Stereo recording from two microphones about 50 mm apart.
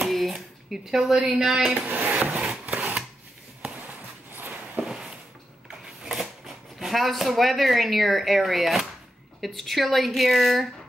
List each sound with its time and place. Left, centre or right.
0.1 s speech: centre
1.9 s speech: right
2.3 s wood: centre
4.7 s walk: centre
6.0 s a woman's voice: centre